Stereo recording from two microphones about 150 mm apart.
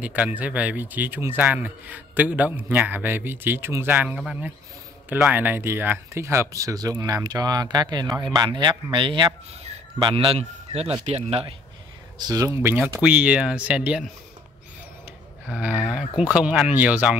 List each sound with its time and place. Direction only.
0.0 s speech: 10° right (ahead or behind); by 11.5 s 40° right (ahead or behind)
12.2 s speech: 25° right (ahead or behind); by 14.0 s 10° right (ahead or behind)
15.4 s speech: 10° right (ahead or behind)